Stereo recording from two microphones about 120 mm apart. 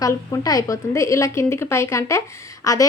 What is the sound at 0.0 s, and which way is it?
A woman's voice, 30° left (ahead or behind).